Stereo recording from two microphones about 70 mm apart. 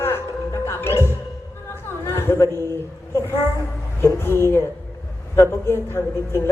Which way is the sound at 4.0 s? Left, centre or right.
Left.